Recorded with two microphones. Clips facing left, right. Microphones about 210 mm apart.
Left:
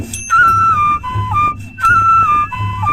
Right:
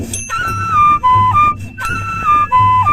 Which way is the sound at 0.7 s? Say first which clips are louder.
Right 6 dB; 80° right.